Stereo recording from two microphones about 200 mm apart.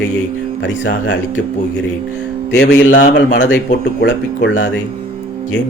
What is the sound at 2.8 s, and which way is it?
Speech, 40° left (ahead or behind).